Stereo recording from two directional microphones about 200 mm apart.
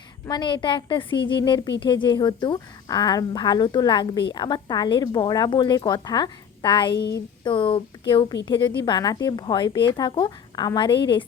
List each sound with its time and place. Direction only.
0.3 s a woman's voice: 20° left (ahead or behind)